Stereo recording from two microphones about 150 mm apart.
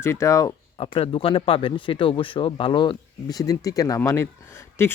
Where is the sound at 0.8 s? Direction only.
35° left (ahead or behind).